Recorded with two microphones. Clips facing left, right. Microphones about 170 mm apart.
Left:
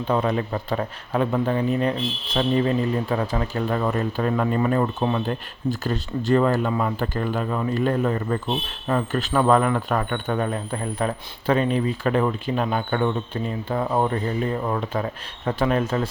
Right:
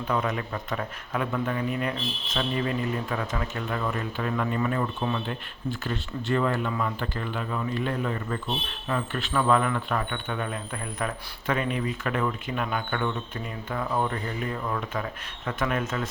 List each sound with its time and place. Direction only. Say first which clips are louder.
0.0 s speech: left 5 dB; 30° left (ahead or behind)